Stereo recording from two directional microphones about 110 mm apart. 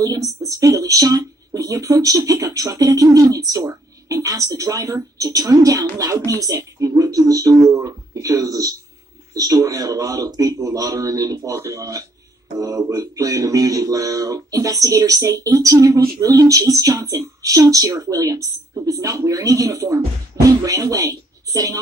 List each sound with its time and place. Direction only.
0.0 s speech: 30° right (ahead or behind)